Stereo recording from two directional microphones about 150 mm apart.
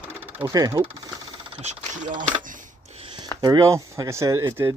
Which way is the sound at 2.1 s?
60° right (ahead or behind).